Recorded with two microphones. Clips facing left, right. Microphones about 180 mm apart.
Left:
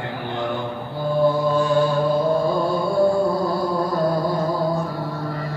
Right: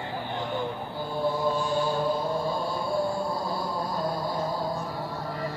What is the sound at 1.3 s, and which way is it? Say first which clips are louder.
Music: left 7 dB; 80° left.